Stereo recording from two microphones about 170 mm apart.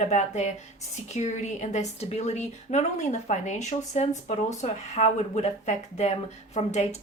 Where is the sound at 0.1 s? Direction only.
40° left (ahead or behind).